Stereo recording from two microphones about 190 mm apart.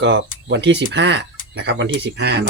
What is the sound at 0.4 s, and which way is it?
Speech, 65° right (ahead or behind).